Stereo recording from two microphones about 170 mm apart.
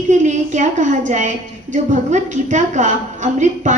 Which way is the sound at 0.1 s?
45° right (ahead or behind).